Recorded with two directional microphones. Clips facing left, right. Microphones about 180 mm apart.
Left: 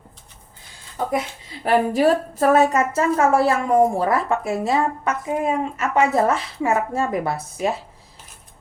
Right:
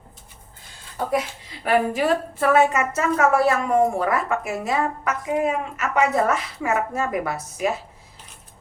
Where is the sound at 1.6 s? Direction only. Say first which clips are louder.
Left 3 dB; 35° left (ahead or behind).